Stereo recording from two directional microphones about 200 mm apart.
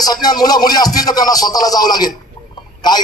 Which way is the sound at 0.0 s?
20° left (ahead or behind).